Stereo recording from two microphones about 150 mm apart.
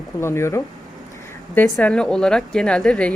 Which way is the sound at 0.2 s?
15° left (ahead or behind).